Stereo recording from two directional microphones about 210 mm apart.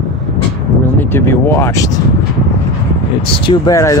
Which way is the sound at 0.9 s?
10° left (ahead or behind).